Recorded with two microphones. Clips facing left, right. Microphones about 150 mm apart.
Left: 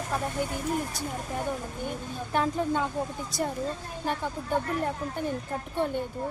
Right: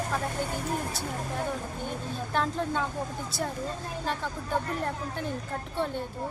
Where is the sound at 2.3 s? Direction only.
10° left (ahead or behind).